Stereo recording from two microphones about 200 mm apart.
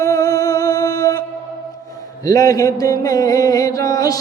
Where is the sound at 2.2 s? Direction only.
15° left (ahead or behind).